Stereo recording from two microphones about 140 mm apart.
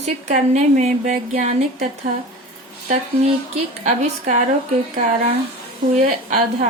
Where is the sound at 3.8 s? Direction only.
60° right (ahead or behind).